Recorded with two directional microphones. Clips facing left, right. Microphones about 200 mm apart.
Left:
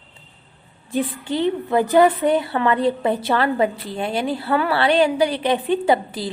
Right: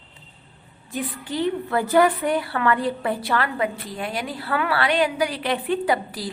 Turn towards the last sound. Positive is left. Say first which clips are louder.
# left 4 dB
turn(degrees=25)  # may be behind; listen again after turning